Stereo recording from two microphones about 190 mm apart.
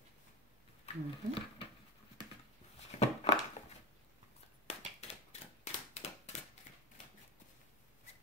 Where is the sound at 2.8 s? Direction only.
35° left (ahead or behind).